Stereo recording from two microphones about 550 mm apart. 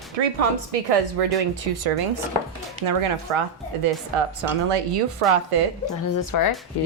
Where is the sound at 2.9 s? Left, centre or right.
Right.